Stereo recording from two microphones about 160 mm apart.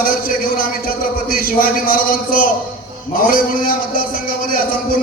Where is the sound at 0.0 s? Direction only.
60° left (ahead or behind).